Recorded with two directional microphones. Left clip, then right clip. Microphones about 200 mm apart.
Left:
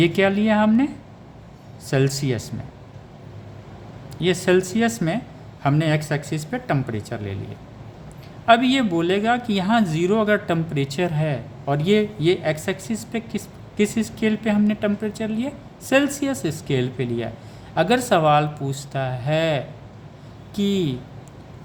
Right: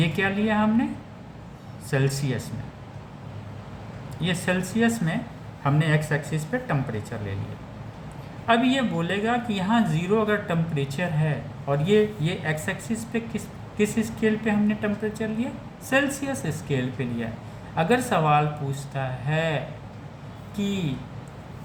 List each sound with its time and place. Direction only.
0.0 s speech: 60° left (ahead or behind)
1.9 s speech: 55° left (ahead or behind)
4.2 s speech: 55° left (ahead or behind)
8.4 s speech: 60° left (ahead or behind)
13.7 s speech: 55° left (ahead or behind)